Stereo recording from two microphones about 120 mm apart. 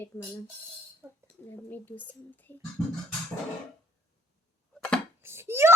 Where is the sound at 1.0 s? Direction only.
15° right (ahead or behind).